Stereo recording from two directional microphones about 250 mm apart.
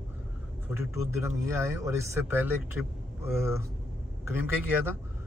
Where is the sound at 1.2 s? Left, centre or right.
Centre.